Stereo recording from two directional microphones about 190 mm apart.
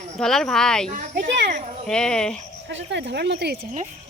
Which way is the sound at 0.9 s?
45° right (ahead or behind).